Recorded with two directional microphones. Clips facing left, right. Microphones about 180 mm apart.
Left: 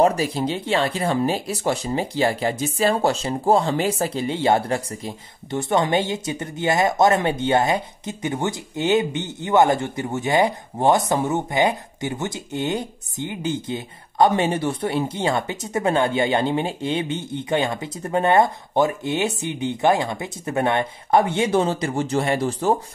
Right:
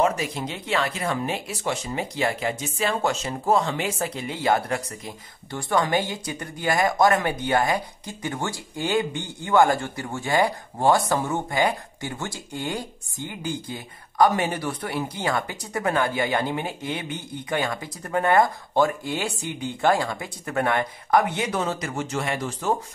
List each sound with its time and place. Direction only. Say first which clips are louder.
0.0 s speech: left 5 dB; 35° left (ahead or behind)